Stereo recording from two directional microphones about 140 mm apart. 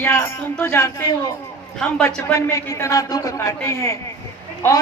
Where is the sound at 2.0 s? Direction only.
15° left (ahead or behind).